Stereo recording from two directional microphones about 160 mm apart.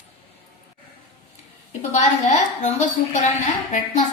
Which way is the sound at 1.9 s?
45° left (ahead or behind).